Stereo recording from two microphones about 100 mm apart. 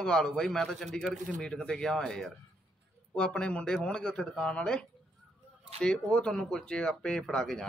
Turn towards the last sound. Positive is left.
turn(degrees=5)  # may be behind; listen again after turning